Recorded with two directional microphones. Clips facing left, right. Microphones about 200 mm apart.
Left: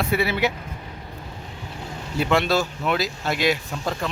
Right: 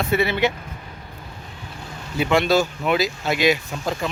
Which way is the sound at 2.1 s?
Centre (ahead or behind).